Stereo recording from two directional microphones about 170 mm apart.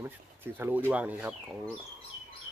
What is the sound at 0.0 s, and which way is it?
Speech, 15° right (ahead or behind).